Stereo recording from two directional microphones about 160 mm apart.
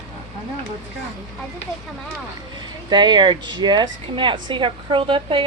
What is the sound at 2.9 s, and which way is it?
Speech, 30° right (ahead or behind).